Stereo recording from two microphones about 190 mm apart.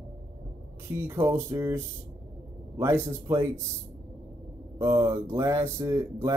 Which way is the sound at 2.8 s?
15° right (ahead or behind).